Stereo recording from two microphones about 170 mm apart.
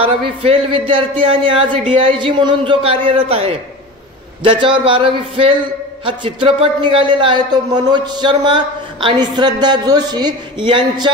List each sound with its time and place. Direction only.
0.0 s a man's voice: 35° right (ahead or behind)